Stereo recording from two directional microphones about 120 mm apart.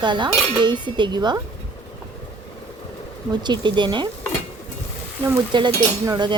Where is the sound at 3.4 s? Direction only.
40° right (ahead or behind).